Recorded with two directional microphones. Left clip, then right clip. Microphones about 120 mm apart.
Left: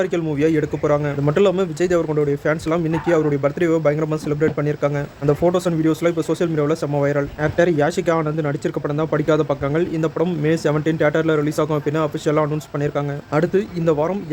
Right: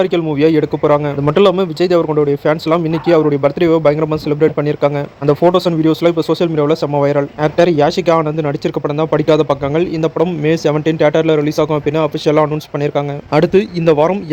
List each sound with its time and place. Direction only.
0.0 s a man's voice: 20° right (ahead or behind)